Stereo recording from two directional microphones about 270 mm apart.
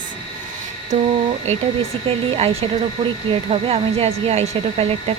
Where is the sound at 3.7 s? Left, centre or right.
Right.